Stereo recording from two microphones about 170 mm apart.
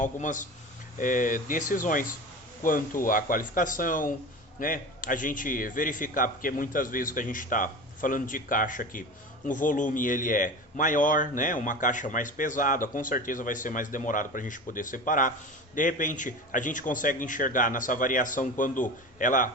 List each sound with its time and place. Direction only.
0.0 s speech: 50° left (ahead or behind)